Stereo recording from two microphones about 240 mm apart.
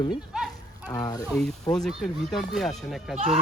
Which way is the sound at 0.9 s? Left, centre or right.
Centre.